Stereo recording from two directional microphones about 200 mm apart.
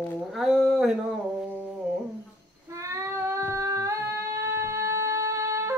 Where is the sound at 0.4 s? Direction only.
Centre (ahead or behind).